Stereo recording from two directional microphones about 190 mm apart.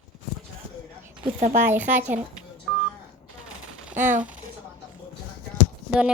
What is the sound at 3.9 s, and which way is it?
Speech, 40° right (ahead or behind).